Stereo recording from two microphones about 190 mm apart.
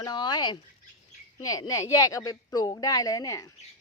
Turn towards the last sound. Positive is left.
turn(degrees=20)  # may be behind; listen again after turning